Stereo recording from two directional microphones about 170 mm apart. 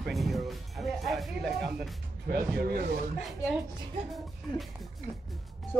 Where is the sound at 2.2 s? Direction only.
65° right (ahead or behind).